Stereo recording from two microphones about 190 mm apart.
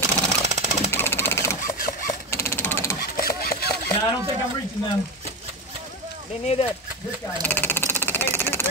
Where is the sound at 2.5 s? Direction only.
10° left (ahead or behind).